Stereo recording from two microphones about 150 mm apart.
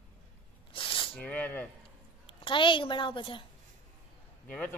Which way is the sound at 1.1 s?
10° left (ahead or behind).